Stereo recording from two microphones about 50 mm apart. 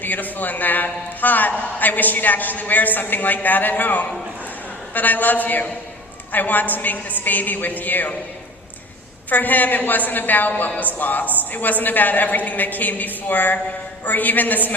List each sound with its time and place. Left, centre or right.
0.0 s a man's voice: left
9.3 s a man's voice: left